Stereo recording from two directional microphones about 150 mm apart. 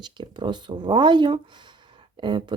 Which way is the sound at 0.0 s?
30° right (ahead or behind).